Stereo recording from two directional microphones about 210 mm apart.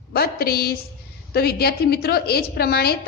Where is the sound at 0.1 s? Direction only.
45° left (ahead or behind).